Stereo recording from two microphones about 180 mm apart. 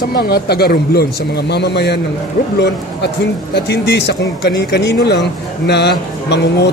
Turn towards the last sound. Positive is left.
turn(degrees=70)  # may be behind; listen again after turning